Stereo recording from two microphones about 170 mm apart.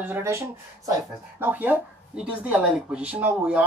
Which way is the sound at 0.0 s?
15° right (ahead or behind).